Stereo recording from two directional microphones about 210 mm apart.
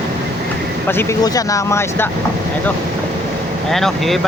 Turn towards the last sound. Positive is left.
turn(degrees=0)  # may be behind; listen again after turning